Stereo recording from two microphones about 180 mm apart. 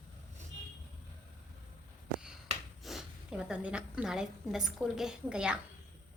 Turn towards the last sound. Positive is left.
turn(degrees=-5)  # may be behind; listen again after turning